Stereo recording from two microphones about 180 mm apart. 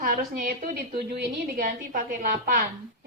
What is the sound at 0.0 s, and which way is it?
A woman's voice, 50° right (ahead or behind).